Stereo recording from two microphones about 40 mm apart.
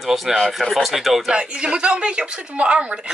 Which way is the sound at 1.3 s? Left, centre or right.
Right.